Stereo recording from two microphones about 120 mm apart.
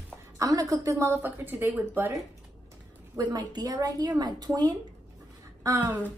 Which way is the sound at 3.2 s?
35° right (ahead or behind).